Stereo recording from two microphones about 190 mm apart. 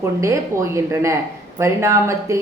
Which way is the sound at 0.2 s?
15° right (ahead or behind).